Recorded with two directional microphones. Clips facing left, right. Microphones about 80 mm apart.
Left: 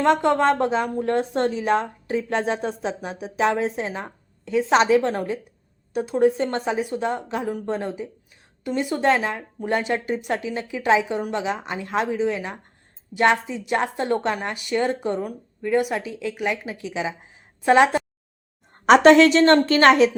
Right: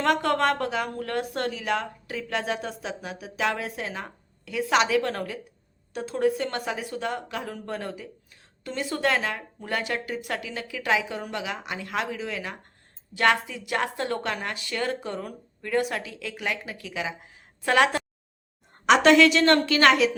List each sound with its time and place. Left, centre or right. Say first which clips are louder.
0.0 s a woman's voice: left 5 dB; left
18.9 s a woman's voice: left 5 dB; left